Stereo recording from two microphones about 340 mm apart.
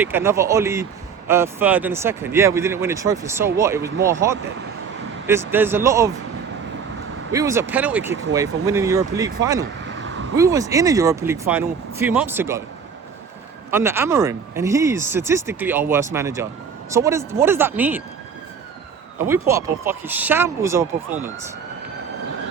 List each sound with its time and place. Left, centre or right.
0.0 s speech: centre
7.3 s speech: centre
9.8 s a sound: right
10.3 s speech: centre
13.7 s speech: centre
19.2 s speech: centre